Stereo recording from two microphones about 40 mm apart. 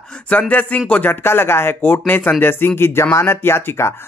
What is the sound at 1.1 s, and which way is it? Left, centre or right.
Speech, left.